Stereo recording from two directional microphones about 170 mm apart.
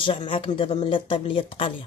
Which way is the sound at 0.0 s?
30° left (ahead or behind).